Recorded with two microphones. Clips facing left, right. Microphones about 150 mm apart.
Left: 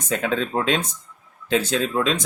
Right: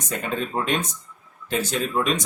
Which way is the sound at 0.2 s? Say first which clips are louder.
Left 1 dB; 90° left.